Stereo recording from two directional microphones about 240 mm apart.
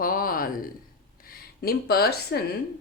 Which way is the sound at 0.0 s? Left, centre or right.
Left.